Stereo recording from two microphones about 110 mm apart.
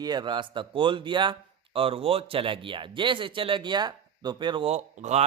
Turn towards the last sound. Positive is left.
turn(degrees=-85)